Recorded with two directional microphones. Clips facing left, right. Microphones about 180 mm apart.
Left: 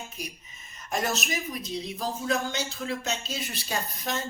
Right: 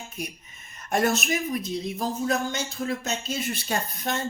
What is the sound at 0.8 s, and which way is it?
Speech, 55° right (ahead or behind).